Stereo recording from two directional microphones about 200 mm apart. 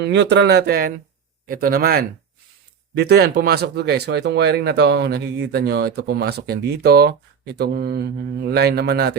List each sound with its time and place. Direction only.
0.0 s speech: 60° right (ahead or behind)